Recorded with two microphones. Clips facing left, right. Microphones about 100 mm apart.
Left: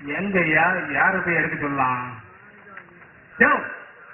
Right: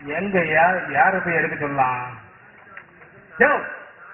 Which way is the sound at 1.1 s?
Centre (ahead or behind).